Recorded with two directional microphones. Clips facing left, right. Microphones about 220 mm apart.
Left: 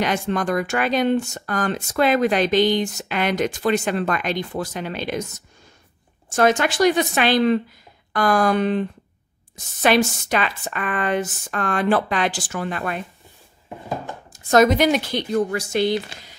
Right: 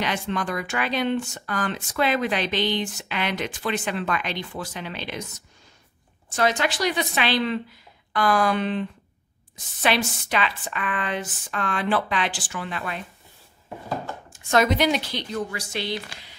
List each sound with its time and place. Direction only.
0.0 s speech: 45° left (ahead or behind)
6.3 s speech: 50° left (ahead or behind)
14.3 s speech: 40° left (ahead or behind)